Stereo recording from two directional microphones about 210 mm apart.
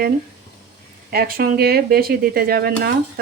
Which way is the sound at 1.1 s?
45° right (ahead or behind).